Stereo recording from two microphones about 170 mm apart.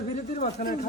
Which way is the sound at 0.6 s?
55° left (ahead or behind).